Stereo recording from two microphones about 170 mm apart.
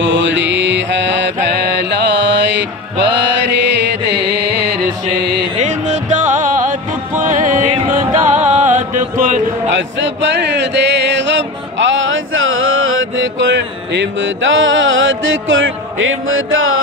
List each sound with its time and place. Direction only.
0.0 s mantra: 90° right
5.6 s music: 45° right (ahead or behind)
9.8 s music: 90° right
13.2 s music: 90° right